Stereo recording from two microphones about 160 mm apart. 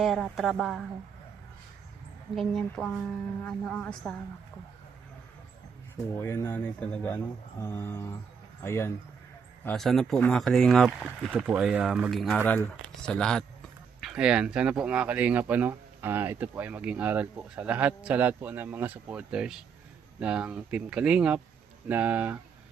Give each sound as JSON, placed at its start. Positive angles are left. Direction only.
{"t": 0.0, "sound": "speech", "side_deg": 0}
{"t": 2.3, "sound": "speech", "side_deg": 0}
{"t": 6.1, "sound": "speech", "side_deg": 15}
{"t": 9.6, "sound": "speech", "side_deg": 0}